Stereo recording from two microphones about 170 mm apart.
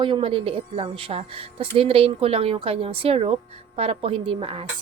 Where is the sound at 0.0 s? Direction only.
30° right (ahead or behind).